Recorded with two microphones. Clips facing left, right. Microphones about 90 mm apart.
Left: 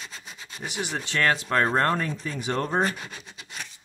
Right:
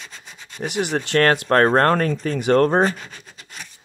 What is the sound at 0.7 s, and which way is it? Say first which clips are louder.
Speech: right 8 dB; 60° right (ahead or behind).